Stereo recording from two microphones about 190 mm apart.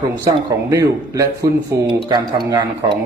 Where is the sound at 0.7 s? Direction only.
15° right (ahead or behind).